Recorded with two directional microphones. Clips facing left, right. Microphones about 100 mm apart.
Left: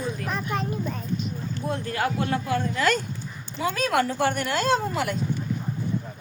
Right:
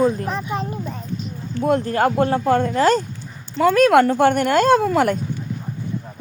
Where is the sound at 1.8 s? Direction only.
40° right (ahead or behind).